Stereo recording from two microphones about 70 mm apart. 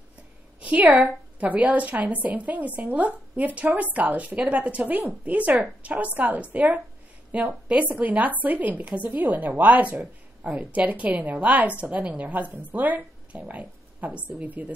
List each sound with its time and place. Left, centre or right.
0.6 s a woman's voice: right